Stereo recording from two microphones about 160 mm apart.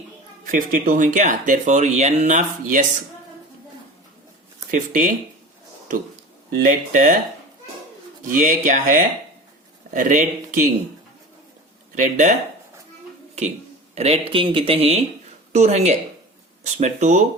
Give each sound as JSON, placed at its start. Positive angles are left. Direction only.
{"t": 0.4, "sound": "speech", "side_deg": -55}
{"t": 4.7, "sound": "speech", "side_deg": -55}
{"t": 6.5, "sound": "speech", "side_deg": -60}
{"t": 8.2, "sound": "speech", "side_deg": -55}
{"t": 11.9, "sound": "speech", "side_deg": -50}
{"t": 13.9, "sound": "speech", "side_deg": -40}